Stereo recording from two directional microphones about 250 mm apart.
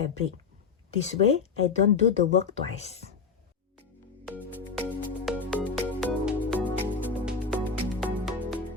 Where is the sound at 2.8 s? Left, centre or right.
Left.